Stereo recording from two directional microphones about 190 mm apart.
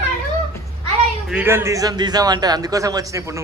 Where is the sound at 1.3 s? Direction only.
10° right (ahead or behind).